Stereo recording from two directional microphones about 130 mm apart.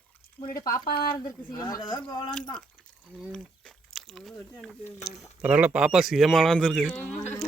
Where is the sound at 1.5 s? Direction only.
30° left (ahead or behind).